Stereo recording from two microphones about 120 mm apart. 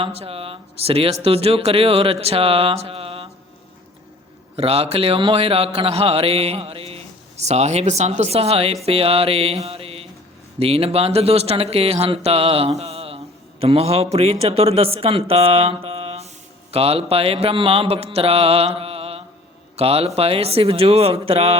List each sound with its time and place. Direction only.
0.0 s mantra: 55° right (ahead or behind)
4.5 s speech: 55° right (ahead or behind)
16.7 s mantra: 55° right (ahead or behind)
19.7 s speech: 55° right (ahead or behind)